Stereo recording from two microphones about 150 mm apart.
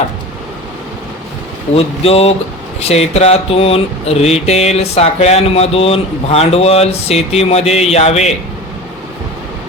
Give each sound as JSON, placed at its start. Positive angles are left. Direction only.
{"t": 1.7, "sound": "speech", "side_deg": 40}
{"t": 2.8, "sound": "mantra", "side_deg": 45}